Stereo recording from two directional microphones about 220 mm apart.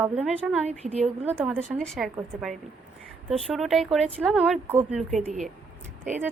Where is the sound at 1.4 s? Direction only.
5° right (ahead or behind).